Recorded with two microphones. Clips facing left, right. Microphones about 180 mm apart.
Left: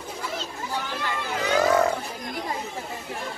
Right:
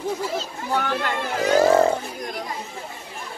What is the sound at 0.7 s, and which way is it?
Speech, 60° right (ahead or behind).